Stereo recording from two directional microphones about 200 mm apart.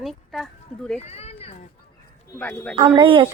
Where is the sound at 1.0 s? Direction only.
30° left (ahead or behind).